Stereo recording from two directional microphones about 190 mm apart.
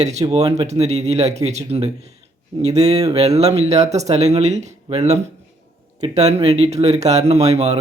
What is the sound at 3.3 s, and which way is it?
Speech, 35° right (ahead or behind).